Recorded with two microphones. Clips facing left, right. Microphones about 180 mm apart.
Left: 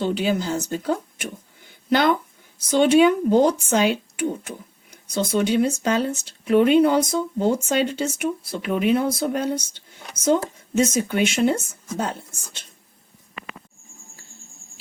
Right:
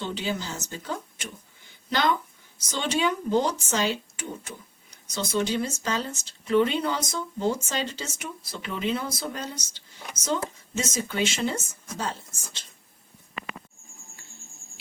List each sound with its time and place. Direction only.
0.0 s speech: 50° left (ahead or behind)